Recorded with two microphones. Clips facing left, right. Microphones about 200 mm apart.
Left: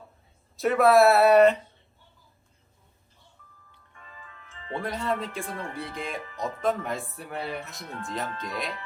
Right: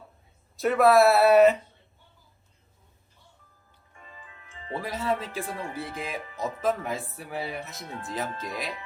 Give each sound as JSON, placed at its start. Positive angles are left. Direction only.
{"t": 0.5, "sound": "speech", "side_deg": 0}
{"t": 3.7, "sound": "music", "side_deg": -35}
{"t": 4.8, "sound": "speech", "side_deg": 0}